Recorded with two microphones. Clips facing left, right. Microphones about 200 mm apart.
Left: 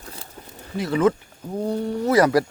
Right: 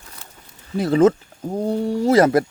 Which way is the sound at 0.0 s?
30° left (ahead or behind).